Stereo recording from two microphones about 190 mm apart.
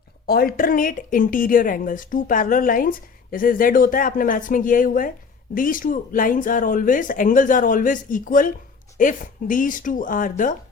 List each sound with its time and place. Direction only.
0.3 s speech: 50° left (ahead or behind)